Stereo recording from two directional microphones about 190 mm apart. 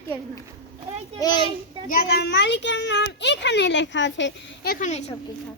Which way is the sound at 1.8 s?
50° left (ahead or behind).